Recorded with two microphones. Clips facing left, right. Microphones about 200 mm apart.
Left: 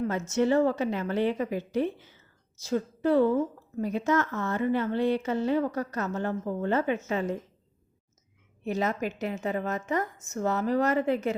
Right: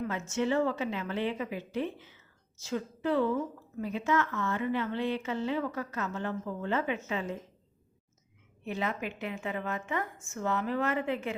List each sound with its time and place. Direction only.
0.0 s a woman's voice: 40° left (ahead or behind)
8.6 s speech: 40° left (ahead or behind)